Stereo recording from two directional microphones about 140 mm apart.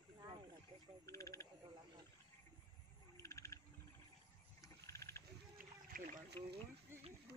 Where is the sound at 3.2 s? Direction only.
20° left (ahead or behind).